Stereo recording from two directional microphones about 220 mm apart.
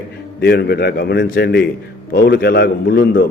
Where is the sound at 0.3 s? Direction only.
50° left (ahead or behind).